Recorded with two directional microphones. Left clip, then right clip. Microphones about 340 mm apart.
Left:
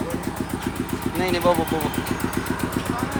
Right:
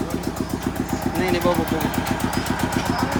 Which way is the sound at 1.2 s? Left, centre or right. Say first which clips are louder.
Left 1 dB; centre.